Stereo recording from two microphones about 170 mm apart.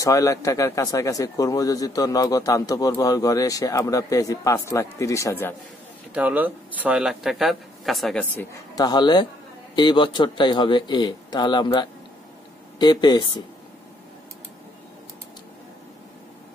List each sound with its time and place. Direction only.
0.0 s speech: 20° left (ahead or behind)
6.1 s a man's voice: 10° right (ahead or behind); by 8.5 s 10° left (ahead or behind)
8.7 s speech: 25° left (ahead or behind)